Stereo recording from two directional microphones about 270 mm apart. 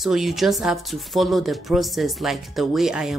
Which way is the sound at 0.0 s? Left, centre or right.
Centre.